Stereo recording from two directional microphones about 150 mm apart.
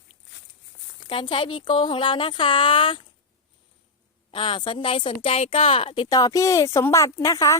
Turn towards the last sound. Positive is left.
turn(degrees=25)  # may be behind; listen again after turning